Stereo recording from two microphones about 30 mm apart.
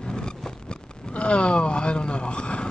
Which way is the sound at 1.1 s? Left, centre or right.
Left.